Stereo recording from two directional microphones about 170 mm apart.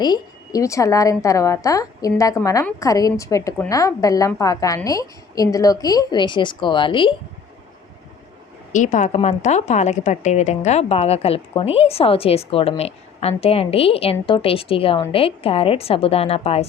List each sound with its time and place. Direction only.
0.0 s a woman's voice: 20° left (ahead or behind)
8.7 s a woman's voice: 45° left (ahead or behind)